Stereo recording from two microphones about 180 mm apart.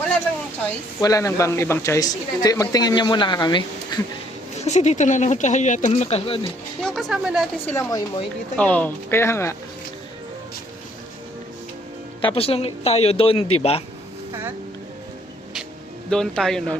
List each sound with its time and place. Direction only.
1.0 s speech: 20° left (ahead or behind)
4.5 s speech: 40° left (ahead or behind)
6.8 s a man's voice: centre (ahead or behind)
7.7 s speech: 20° left (ahead or behind)
8.5 s speech: 10° left (ahead or behind)
12.2 s speech: 30° left (ahead or behind)
16.0 s a man's voice: 5° left (ahead or behind)